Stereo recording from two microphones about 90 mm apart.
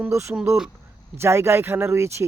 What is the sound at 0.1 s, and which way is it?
Speech, 35° right (ahead or behind).